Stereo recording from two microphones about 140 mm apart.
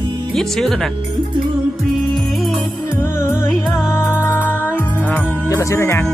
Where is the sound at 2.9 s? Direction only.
15° left (ahead or behind).